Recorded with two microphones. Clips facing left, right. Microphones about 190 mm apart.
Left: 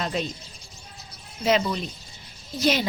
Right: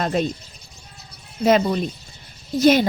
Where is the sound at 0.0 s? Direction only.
50° right (ahead or behind).